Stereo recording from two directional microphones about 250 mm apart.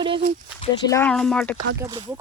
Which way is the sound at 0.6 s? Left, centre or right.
Centre.